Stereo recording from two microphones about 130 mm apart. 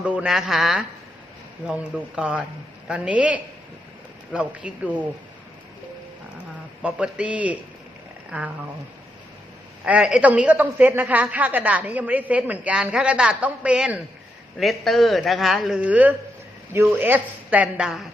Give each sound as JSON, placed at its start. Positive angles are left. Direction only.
{"t": 0.0, "sound": "a man's voice", "side_deg": -10}
{"t": 6.8, "sound": "a woman's voice", "side_deg": -10}
{"t": 9.8, "sound": "a woman's voice", "side_deg": -10}